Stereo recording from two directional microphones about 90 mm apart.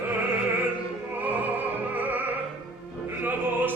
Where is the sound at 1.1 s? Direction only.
20° right (ahead or behind).